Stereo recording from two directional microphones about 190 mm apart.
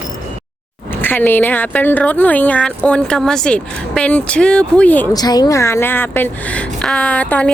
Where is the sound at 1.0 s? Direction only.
10° left (ahead or behind).